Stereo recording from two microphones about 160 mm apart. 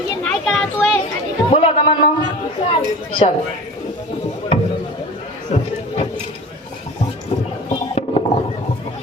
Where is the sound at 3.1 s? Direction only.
35° left (ahead or behind).